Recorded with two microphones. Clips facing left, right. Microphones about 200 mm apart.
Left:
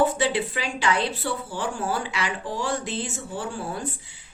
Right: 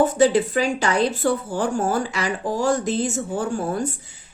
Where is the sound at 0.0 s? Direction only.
45° right (ahead or behind).